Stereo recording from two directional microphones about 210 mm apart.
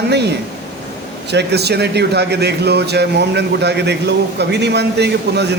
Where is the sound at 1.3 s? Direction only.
50° right (ahead or behind).